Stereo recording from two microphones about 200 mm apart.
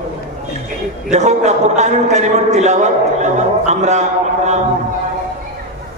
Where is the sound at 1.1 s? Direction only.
35° right (ahead or behind).